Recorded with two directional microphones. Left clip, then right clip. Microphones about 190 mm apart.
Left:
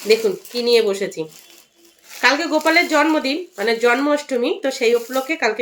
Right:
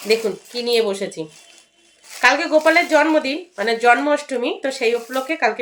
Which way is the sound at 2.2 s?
5° left (ahead or behind).